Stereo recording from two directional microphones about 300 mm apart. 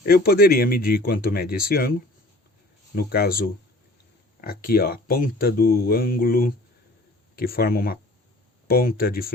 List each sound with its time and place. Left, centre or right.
0.0 s speech: left